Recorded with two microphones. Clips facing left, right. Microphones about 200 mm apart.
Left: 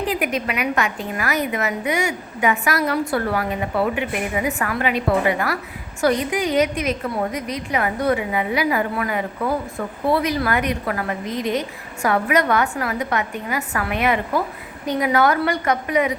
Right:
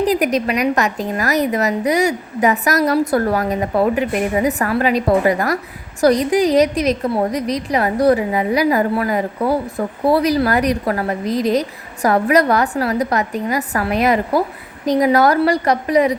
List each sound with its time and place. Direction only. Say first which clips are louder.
0.0 s a woman's voice: right 6 dB; 40° right (ahead or behind)